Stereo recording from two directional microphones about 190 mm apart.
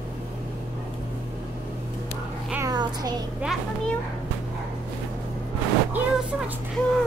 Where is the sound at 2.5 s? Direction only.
20° right (ahead or behind).